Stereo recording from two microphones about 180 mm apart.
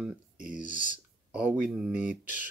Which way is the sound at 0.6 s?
45° left (ahead or behind).